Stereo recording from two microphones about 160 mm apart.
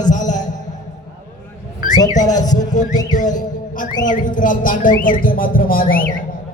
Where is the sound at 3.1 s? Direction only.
55° left (ahead or behind).